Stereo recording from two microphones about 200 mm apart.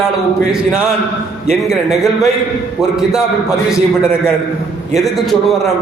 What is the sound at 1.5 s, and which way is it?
Speech, centre (ahead or behind).